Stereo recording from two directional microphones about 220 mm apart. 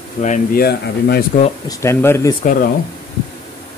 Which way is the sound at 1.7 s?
15° left (ahead or behind).